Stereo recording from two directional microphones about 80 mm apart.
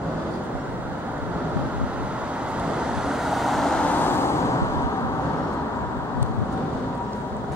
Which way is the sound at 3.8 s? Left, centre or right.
Left.